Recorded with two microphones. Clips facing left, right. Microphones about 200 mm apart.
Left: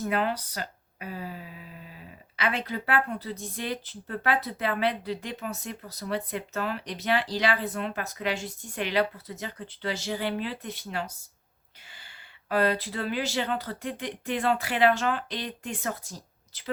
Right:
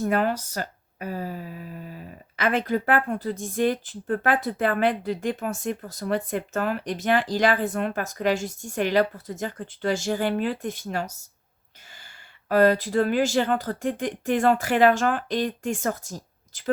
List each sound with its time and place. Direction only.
0.0 s speech: 45° right (ahead or behind)
12.5 s speech: 45° right (ahead or behind)